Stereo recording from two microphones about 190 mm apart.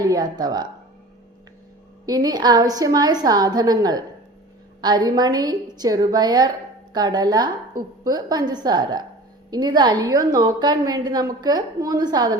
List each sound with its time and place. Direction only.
0.1 s a woman's voice: 20° right (ahead or behind)
2.0 s a woman's voice: 20° right (ahead or behind)